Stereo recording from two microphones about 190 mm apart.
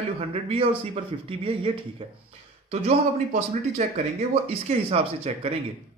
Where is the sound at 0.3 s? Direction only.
30° right (ahead or behind).